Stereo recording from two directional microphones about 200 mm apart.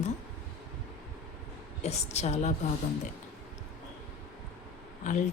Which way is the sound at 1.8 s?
35° left (ahead or behind).